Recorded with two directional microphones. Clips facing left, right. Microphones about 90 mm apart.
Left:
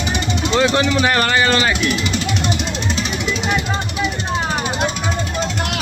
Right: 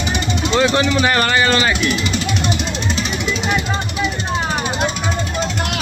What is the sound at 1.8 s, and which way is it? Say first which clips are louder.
Jackhammer: even; 15° left (ahead or behind).